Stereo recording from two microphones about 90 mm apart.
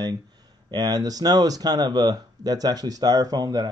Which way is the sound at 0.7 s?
45° right (ahead or behind).